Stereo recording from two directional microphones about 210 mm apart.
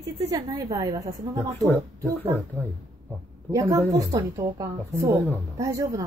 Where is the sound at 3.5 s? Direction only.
15° right (ahead or behind).